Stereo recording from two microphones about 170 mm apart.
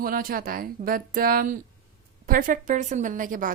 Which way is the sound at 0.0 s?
60° right (ahead or behind).